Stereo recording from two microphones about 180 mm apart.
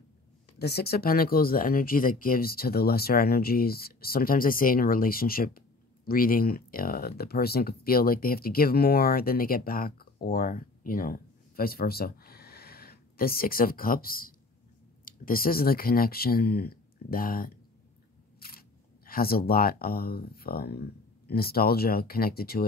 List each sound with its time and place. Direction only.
0.6 s speech: 60° left (ahead or behind)